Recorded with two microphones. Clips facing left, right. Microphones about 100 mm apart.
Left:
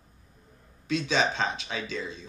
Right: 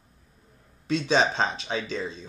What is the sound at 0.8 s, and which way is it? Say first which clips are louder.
Speech: right 3 dB; 30° right (ahead or behind).